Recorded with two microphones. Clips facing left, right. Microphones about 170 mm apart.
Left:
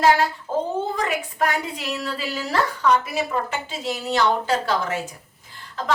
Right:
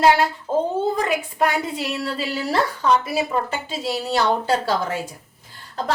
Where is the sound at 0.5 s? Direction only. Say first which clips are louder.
Right 3 dB; 30° right (ahead or behind).